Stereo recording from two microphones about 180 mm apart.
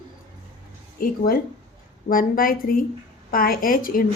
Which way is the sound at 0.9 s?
55° left (ahead or behind).